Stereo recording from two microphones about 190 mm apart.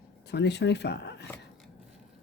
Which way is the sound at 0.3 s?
60° left (ahead or behind).